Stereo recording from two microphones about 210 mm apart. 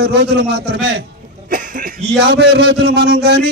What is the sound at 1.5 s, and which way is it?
A man's voice, 40° right (ahead or behind).